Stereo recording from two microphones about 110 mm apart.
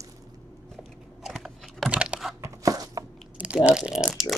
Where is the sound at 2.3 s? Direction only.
30° right (ahead or behind).